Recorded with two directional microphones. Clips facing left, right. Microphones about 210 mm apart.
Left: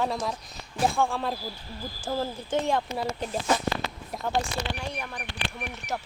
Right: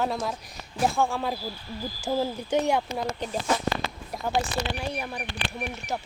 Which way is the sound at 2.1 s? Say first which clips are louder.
Right 3 dB; 10° right (ahead or behind).